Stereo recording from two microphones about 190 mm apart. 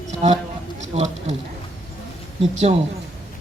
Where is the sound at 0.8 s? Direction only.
35° right (ahead or behind).